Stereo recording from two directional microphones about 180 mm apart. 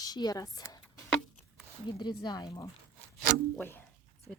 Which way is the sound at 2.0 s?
25° left (ahead or behind).